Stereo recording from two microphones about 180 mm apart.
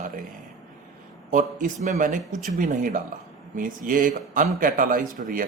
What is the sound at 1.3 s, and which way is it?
Speech, 45° right (ahead or behind).